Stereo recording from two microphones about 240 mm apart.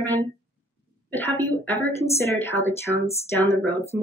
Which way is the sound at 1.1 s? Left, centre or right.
Centre.